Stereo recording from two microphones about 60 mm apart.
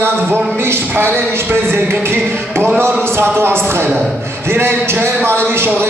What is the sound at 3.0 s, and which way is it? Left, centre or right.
Speech, right.